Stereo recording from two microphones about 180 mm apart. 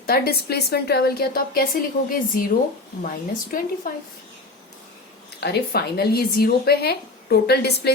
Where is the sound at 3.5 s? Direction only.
50° left (ahead or behind).